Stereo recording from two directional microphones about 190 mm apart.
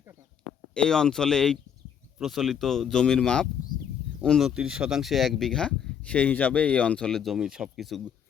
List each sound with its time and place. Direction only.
0.7 s speech: 5° left (ahead or behind)